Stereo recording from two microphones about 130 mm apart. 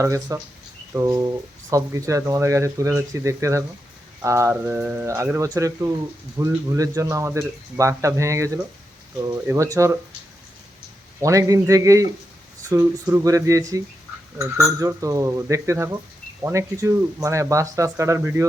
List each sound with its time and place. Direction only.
0.0 s speech: 25° right (ahead or behind)
4.2 s mantra: 25° right (ahead or behind)
5.0 s speech: 20° right (ahead or behind)
11.2 s speech: 25° right (ahead or behind)